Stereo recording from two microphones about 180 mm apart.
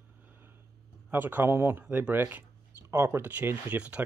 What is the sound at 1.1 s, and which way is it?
Speech, 10° right (ahead or behind).